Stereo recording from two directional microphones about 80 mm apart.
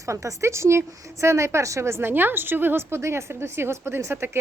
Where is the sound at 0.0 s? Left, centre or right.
Right.